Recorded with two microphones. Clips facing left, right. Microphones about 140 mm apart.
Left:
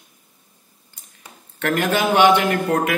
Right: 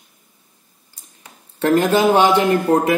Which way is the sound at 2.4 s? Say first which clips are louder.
Right 5 dB; 20° right (ahead or behind).